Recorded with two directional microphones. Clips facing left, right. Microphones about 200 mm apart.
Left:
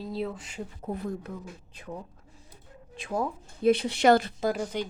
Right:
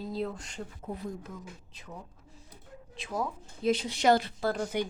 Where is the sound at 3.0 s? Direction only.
55° left (ahead or behind).